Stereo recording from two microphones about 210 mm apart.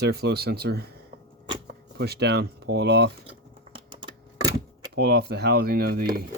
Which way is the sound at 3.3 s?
25° right (ahead or behind).